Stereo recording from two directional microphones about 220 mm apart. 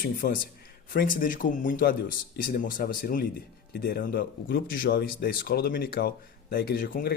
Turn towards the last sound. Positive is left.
turn(degrees=40)  # may be behind; listen again after turning